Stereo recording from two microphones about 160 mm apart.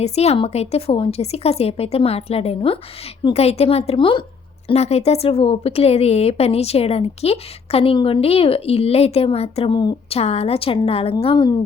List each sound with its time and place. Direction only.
0.0 s speech: 40° left (ahead or behind)